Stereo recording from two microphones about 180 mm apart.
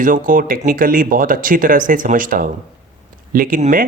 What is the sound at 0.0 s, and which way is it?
Speech, 50° right (ahead or behind).